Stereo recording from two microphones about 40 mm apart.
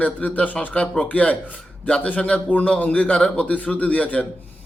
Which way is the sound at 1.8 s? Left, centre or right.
Left.